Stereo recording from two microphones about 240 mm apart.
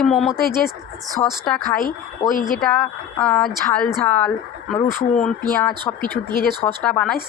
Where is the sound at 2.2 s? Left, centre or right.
Centre.